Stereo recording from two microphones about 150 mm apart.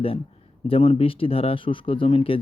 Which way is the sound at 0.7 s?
35° left (ahead or behind).